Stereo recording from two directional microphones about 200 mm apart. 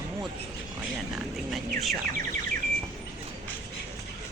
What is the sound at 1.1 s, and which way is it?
Bird, centre (ahead or behind).